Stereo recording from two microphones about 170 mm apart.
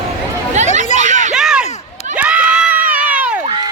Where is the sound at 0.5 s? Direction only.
45° right (ahead or behind).